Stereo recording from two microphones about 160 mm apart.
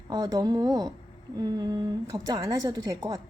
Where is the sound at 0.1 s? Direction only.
25° right (ahead or behind).